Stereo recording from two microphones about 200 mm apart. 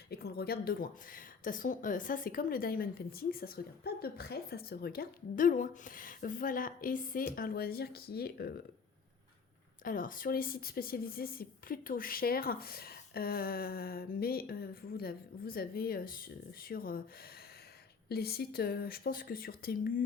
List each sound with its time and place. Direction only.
0.1 s speech: 50° left (ahead or behind)
9.8 s speech: 45° left (ahead or behind)
18.1 s speech: 50° left (ahead or behind)